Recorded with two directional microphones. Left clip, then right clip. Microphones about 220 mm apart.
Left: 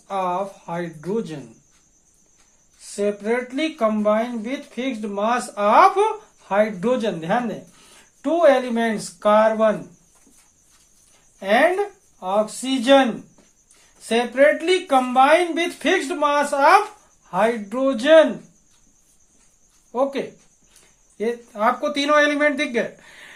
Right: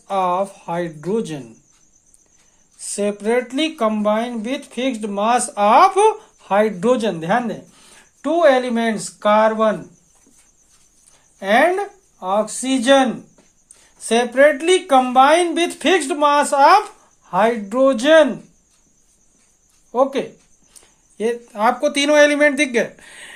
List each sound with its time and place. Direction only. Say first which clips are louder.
0.1 s speech: right 5 dB; 40° right (ahead or behind)
2.8 s speech: right 2 dB; 40° right (ahead or behind)
11.3 s speech: right 2 dB; 35° right (ahead or behind)
19.9 s speech: right 5 dB; 35° right (ahead or behind)